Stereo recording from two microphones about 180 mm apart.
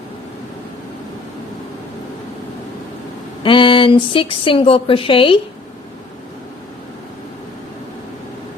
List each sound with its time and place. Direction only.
3.4 s speech: 30° left (ahead or behind)